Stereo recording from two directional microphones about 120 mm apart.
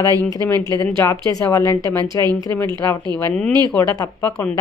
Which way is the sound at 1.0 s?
25° left (ahead or behind).